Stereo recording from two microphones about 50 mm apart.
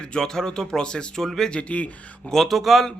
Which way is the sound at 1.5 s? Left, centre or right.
Left.